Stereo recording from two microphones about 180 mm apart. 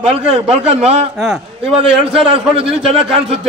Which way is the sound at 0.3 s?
35° right (ahead or behind).